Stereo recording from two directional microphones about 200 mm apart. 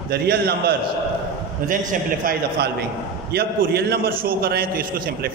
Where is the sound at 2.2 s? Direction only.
50° right (ahead or behind).